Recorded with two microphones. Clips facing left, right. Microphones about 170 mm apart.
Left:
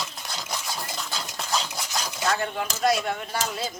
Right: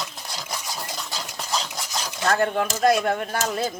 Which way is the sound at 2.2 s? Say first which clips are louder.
Right 6 dB; 55° right (ahead or behind).